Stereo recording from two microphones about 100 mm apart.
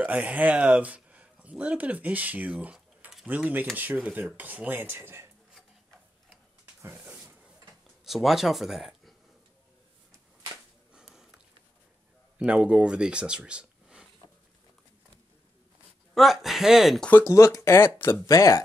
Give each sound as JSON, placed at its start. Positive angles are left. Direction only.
{"t": 0.0, "sound": "speech", "side_deg": -15}
{"t": 7.1, "sound": "a sound", "side_deg": -20}
{"t": 8.0, "sound": "speech", "side_deg": 0}
{"t": 11.0, "sound": "sniff", "side_deg": -5}
{"t": 12.4, "sound": "speech", "side_deg": -10}
{"t": 16.2, "sound": "speech", "side_deg": 0}
{"t": 17.2, "sound": "speech", "side_deg": 30}
{"t": 18.2, "sound": "speech", "side_deg": 35}